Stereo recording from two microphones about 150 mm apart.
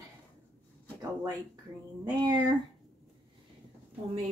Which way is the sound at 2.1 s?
25° right (ahead or behind).